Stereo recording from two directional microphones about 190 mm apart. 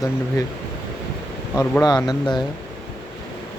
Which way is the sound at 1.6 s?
20° left (ahead or behind).